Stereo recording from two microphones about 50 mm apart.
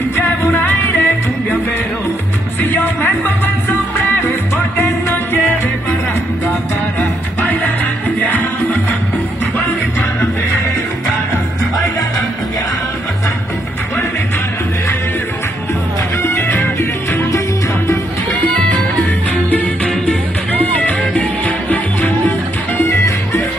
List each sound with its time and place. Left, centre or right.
0.1 s music: left
2.6 s music: left
7.0 s music: left
16.2 s music: left
16.5 s music: left
22.8 s music: left